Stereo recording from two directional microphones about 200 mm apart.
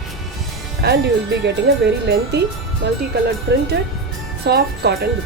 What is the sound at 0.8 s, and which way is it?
Speech, 55° right (ahead or behind).